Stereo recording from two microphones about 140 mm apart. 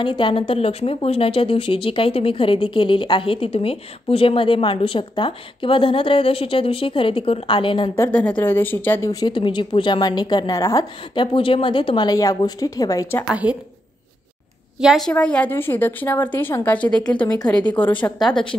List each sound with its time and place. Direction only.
0.0 s speech: 35° left (ahead or behind)
7.9 s speech: 15° left (ahead or behind)
11.3 s speech: 40° left (ahead or behind)
12.1 s speech: 25° left (ahead or behind)
13.3 s a woman's voice: 10° right (ahead or behind)
14.8 s a woman's voice: centre (ahead or behind)